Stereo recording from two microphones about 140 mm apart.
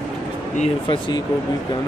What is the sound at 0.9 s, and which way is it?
Speech, 30° left (ahead or behind).